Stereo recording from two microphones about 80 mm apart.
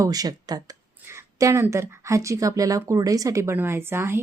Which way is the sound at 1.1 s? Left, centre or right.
Right.